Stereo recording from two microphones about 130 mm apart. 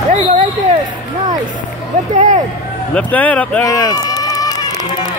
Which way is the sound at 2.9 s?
10° left (ahead or behind).